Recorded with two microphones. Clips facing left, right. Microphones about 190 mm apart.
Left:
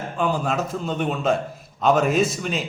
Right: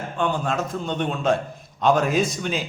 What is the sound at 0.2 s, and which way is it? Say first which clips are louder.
A man's voice: left 1 dB; 5° left (ahead or behind).